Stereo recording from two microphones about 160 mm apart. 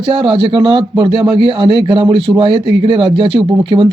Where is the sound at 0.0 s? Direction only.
30° right (ahead or behind).